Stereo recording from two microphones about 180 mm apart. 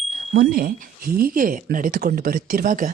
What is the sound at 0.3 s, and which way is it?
Speech, 55° right (ahead or behind).